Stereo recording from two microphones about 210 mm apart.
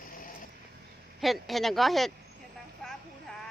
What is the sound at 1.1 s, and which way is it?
Speech, centre (ahead or behind).